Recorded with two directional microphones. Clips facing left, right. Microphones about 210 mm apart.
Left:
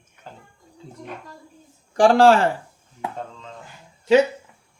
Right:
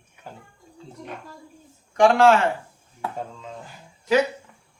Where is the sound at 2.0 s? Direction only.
35° left (ahead or behind).